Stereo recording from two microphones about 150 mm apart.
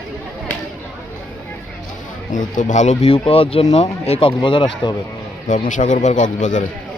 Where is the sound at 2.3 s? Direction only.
60° left (ahead or behind); by 4.4 s 40° left (ahead or behind).